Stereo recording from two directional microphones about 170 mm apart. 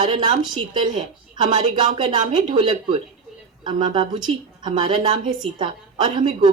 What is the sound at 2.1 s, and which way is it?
A woman's voice, 25° right (ahead or behind).